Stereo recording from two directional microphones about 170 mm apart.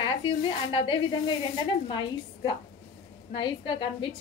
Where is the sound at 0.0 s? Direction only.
30° left (ahead or behind).